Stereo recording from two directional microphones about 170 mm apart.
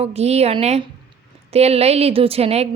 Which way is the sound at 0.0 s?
40° right (ahead or behind).